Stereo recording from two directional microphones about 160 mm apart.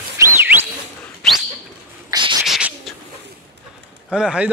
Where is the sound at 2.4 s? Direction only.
Centre (ahead or behind).